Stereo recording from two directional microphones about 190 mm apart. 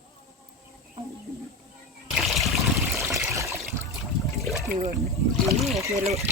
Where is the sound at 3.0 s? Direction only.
15° right (ahead or behind).